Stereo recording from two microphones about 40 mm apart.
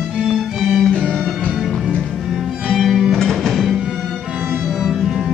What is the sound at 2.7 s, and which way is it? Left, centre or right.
Music, centre.